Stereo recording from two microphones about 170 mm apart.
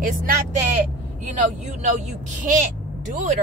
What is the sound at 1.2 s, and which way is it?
Speech, 45° right (ahead or behind).